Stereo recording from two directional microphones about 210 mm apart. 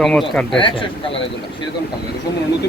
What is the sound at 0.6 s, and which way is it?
Speech, 25° left (ahead or behind).